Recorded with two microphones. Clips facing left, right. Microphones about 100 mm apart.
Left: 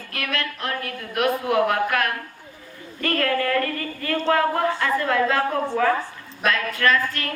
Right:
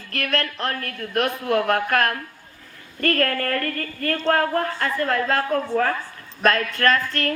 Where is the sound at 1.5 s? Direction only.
50° right (ahead or behind).